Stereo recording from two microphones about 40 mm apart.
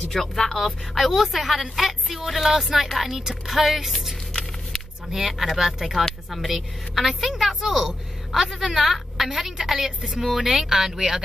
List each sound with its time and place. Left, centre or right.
0.1 s speech: centre
0.9 s a woman's voice: centre
4.3 s a sound: centre
5.1 s a woman's voice: centre
8.8 s a woman's voice: centre